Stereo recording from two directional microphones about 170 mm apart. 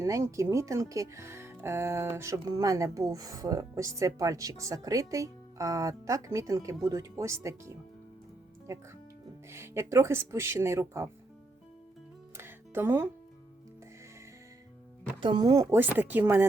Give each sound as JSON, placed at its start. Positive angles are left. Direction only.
{"t": 0.0, "sound": "speech", "side_deg": -20}
{"t": 12.4, "sound": "music", "side_deg": -15}
{"t": 15.2, "sound": "speech", "side_deg": -25}